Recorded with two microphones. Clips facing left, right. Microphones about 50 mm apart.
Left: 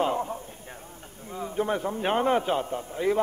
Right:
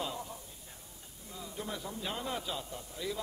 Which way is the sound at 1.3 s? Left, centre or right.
Left.